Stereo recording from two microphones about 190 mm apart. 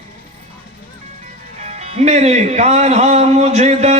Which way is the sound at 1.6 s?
35° right (ahead or behind).